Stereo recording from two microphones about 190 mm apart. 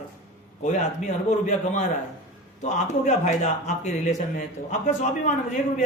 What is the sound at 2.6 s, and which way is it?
Speech, 40° left (ahead or behind).